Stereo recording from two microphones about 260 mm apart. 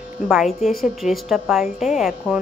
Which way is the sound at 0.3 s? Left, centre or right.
Centre.